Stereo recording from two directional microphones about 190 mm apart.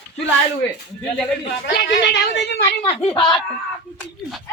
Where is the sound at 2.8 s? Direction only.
30° left (ahead or behind).